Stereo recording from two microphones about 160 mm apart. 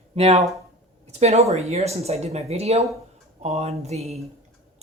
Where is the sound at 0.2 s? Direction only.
40° right (ahead or behind).